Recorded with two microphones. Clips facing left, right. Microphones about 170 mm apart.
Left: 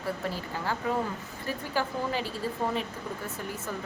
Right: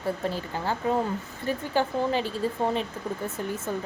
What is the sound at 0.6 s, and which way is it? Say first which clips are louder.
A woman's voice: right 4 dB; 25° right (ahead or behind).